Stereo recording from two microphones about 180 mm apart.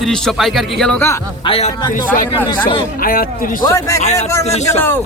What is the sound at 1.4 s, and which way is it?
Speech, 30° left (ahead or behind).